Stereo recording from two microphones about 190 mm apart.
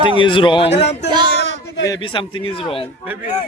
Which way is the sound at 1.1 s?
30° right (ahead or behind).